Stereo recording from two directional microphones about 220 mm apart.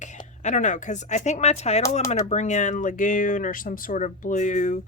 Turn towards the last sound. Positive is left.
turn(degrees=35)  # may be behind; listen again after turning